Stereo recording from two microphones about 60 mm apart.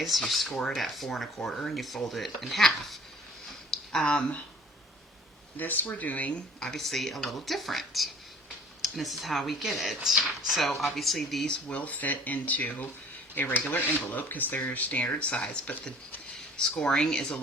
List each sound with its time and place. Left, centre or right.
0.0 s speech: centre
3.7 s a sound: centre
5.5 s speech: left
6.6 s speech: centre
11.7 s speech: left
16.6 s speech: centre